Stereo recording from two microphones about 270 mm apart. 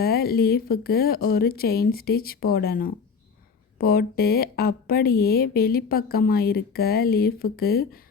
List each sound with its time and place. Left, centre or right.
0.0 s speech: left